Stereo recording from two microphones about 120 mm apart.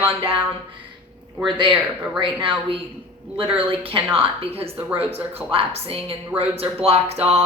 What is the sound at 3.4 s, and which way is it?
A woman's voice, 50° right (ahead or behind).